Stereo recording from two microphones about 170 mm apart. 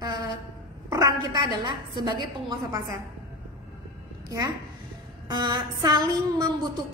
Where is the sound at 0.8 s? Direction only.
20° right (ahead or behind).